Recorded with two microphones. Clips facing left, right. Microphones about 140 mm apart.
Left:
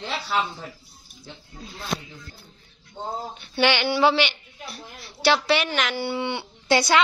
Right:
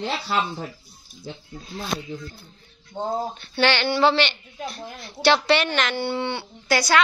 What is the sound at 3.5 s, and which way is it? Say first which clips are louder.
A woman's voice: even; 10° left (ahead or behind).